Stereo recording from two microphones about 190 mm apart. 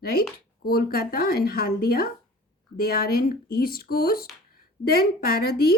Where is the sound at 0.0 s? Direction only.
55° left (ahead or behind).